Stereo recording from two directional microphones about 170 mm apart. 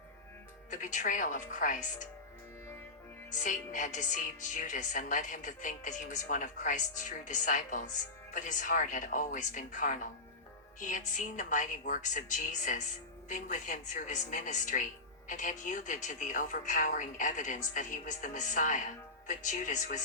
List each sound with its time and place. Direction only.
0.7 s speech: 50° left (ahead or behind)
3.3 s speech: 45° left (ahead or behind)